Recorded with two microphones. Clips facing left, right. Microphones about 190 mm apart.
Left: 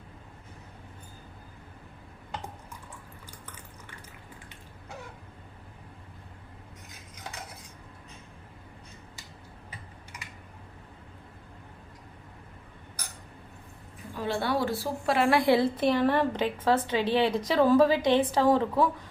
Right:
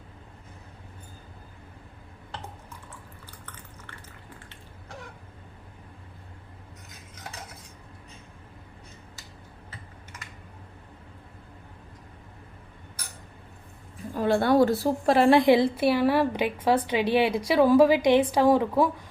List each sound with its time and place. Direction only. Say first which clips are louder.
14.2 s a woman's voice: right 8 dB; 50° right (ahead or behind)
15.3 s a woman's voice: right 3 dB; 20° right (ahead or behind)